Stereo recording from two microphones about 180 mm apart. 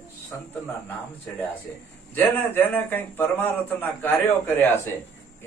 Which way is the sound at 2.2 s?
10° left (ahead or behind).